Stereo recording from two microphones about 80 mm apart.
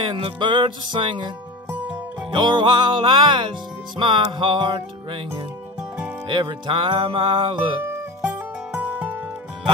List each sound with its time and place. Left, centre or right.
0.0 s music: right
2.3 s music: right